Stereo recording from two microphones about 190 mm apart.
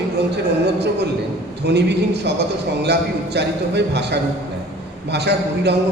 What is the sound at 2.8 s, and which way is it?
Speech, 60° right (ahead or behind).